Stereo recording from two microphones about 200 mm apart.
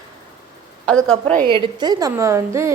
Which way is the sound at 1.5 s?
20° right (ahead or behind).